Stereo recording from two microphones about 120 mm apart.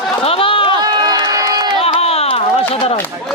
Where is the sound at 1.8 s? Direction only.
55° left (ahead or behind).